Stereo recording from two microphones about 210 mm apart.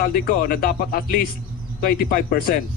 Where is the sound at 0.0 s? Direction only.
45° left (ahead or behind).